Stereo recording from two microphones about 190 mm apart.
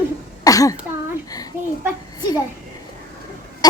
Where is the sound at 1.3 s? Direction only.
20° left (ahead or behind).